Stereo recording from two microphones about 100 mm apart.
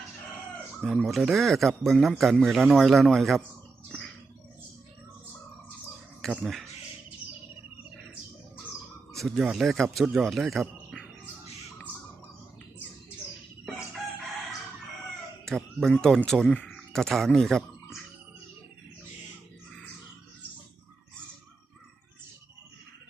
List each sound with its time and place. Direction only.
1.0 s speech: centre (ahead or behind)
6.4 s speech: centre (ahead or behind)
9.1 s speech: centre (ahead or behind)
15.4 s speech: 5° left (ahead or behind)